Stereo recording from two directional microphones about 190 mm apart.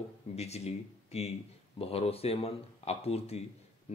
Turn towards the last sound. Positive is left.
turn(degrees=35)  # may be behind; listen again after turning